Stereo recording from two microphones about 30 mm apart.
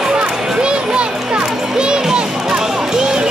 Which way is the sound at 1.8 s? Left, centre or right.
Right.